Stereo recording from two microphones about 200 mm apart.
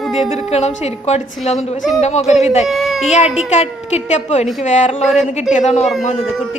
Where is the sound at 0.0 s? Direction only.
Centre (ahead or behind).